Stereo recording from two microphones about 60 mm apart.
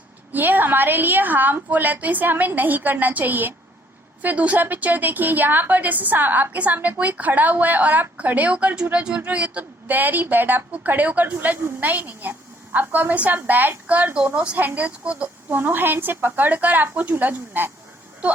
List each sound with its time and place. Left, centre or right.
0.3 s a woman's voice: right
8.5 s a woman's voice: centre
15.4 s a woman's voice: right